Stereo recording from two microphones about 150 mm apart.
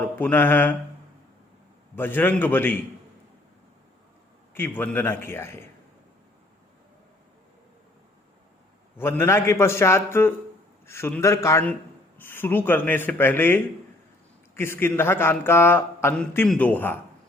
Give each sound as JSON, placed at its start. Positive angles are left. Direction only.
{"t": 0.0, "sound": "a man's voice", "side_deg": 10}
{"t": 2.0, "sound": "a man's voice", "side_deg": 15}
{"t": 4.5, "sound": "a man's voice", "side_deg": 15}
{"t": 9.0, "sound": "a man's voice", "side_deg": 15}